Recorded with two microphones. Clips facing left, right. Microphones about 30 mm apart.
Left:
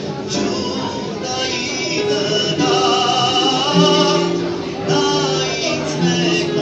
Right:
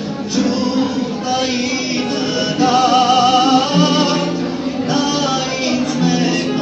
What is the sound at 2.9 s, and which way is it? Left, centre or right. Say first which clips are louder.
Music: right 4 dB; right.